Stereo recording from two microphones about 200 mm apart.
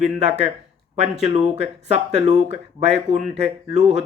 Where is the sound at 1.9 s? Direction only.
35° right (ahead or behind).